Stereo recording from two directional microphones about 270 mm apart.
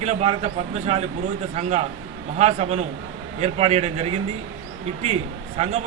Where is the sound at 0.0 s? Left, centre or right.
Right.